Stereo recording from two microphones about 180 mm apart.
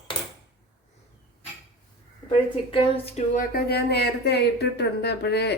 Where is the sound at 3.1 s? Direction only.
50° left (ahead or behind).